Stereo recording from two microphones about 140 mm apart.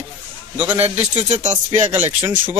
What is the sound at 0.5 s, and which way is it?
Speech, 10° right (ahead or behind).